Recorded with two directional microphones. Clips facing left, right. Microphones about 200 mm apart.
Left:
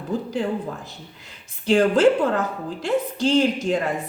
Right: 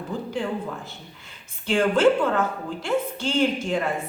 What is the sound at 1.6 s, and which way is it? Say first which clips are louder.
A woman's voice: left 3 dB; 35° left (ahead or behind).